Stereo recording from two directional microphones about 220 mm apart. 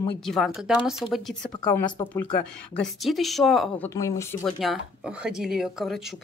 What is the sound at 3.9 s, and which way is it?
Speech, 15° left (ahead or behind).